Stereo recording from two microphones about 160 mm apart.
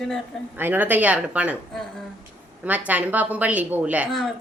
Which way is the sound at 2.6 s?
10° right (ahead or behind).